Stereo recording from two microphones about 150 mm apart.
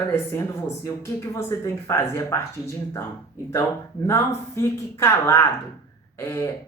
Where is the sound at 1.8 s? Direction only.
20° left (ahead or behind).